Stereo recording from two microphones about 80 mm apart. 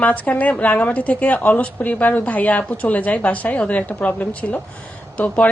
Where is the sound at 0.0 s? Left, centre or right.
Centre.